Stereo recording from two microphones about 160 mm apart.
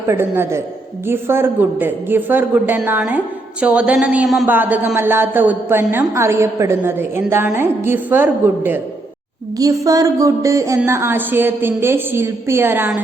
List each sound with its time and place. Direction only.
0.1 s a woman's voice: 15° right (ahead or behind)
9.6 s a sound: 20° right (ahead or behind)
10.8 s a woman's voice: 15° right (ahead or behind)